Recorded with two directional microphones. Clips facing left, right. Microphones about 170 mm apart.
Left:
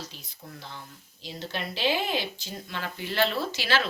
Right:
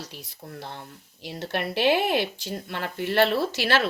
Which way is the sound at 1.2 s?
65° right (ahead or behind).